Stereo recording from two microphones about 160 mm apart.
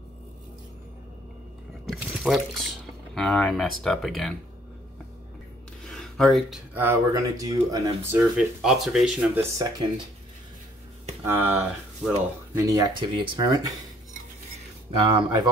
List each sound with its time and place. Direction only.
1.9 s speech: centre (ahead or behind)
5.9 s a sound: 5° left (ahead or behind)
6.7 s speech: 15° right (ahead or behind)
9.4 s speech: 25° right (ahead or behind)
11.2 s speech: 10° right (ahead or behind)
12.5 s speech: 20° right (ahead or behind)
15.0 s speech: 30° right (ahead or behind)